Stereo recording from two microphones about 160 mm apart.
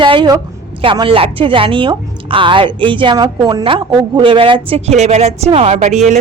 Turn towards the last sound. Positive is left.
turn(degrees=-45)  # may be behind; listen again after turning